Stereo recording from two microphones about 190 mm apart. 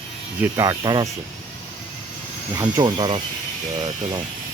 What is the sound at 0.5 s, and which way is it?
Speech, 20° right (ahead or behind).